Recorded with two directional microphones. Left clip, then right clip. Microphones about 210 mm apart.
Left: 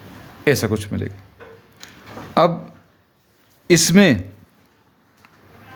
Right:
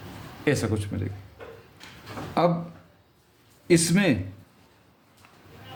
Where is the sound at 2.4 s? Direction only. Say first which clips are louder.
Left 7 dB; 45° left (ahead or behind).